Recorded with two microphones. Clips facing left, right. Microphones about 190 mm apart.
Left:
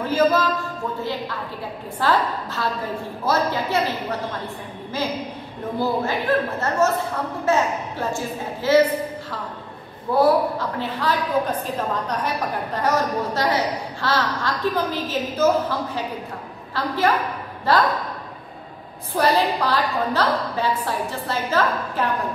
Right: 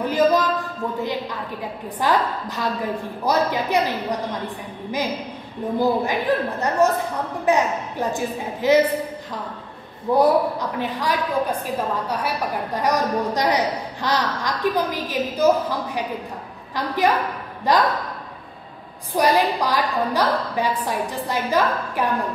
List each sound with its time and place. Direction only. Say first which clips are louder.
0.0 s a sound: right 1 dB; 15° right (ahead or behind)
2.0 s a woman's voice: even; 15° right (ahead or behind)
5.8 s a woman's voice: right 2 dB; 15° right (ahead or behind)
10.1 s a woman's voice: even; 15° right (ahead or behind)
19.1 s a woman's voice: right 1 dB; 15° right (ahead or behind)